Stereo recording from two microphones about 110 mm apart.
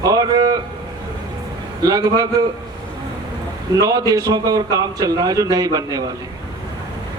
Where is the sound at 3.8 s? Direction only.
35° right (ahead or behind).